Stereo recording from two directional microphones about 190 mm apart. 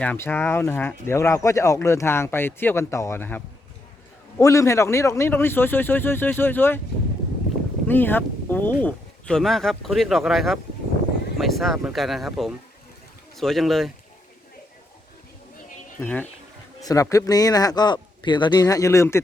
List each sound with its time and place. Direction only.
0.0 s speech: 10° left (ahead or behind)
7.9 s speech: 10° left (ahead or behind)
16.0 s speech: 10° left (ahead or behind)